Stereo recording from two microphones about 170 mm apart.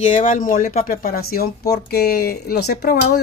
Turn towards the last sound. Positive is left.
turn(degrees=70)  # may be behind; listen again after turning